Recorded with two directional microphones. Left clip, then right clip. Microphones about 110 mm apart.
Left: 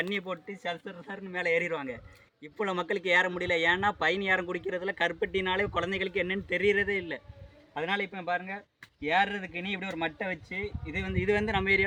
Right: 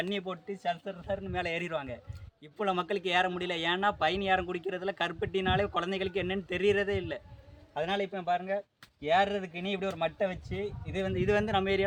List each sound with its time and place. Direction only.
0.1 s a man's voice: 35° right (ahead or behind)